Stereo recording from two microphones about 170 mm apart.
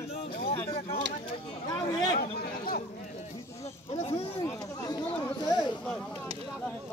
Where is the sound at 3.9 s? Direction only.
40° left (ahead or behind).